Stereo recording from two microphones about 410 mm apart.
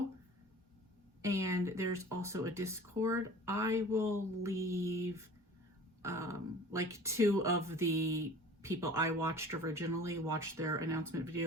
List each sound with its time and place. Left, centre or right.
1.2 s speech: centre